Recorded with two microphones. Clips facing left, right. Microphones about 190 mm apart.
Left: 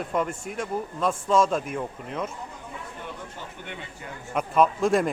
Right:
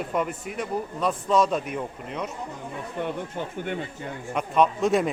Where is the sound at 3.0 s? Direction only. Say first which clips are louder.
Right 9 dB; 55° right (ahead or behind).